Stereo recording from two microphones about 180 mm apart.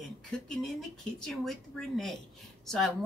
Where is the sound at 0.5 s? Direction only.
Centre (ahead or behind).